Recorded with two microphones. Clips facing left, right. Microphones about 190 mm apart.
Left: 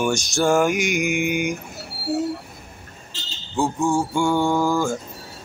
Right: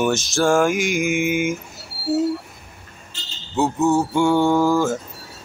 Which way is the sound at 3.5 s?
5° right (ahead or behind).